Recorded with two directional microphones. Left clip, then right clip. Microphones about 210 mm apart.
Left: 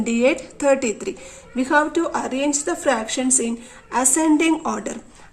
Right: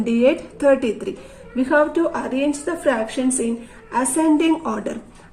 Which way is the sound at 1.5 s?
40° left (ahead or behind).